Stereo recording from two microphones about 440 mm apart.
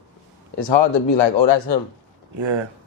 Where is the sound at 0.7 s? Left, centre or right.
Left.